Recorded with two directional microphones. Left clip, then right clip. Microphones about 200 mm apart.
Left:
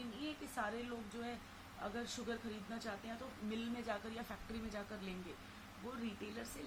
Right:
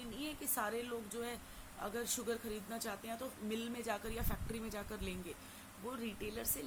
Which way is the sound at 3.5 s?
50° right (ahead or behind).